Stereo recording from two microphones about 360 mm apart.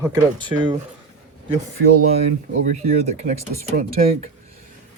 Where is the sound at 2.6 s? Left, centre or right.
Centre.